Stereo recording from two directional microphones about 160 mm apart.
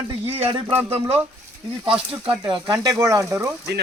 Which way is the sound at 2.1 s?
30° right (ahead or behind).